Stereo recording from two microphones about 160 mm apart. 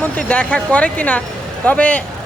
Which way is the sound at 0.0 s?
10° left (ahead or behind).